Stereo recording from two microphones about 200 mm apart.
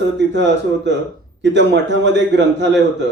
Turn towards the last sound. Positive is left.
turn(degrees=-60)  # may be behind; listen again after turning